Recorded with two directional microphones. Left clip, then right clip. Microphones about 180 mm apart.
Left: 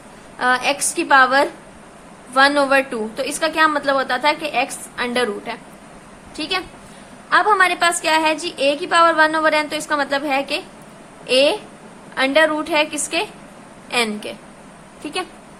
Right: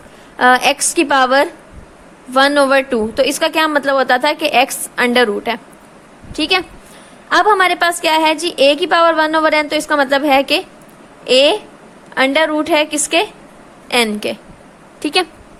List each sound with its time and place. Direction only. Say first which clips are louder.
0.3 s a woman's voice: right 7 dB; 45° right (ahead or behind)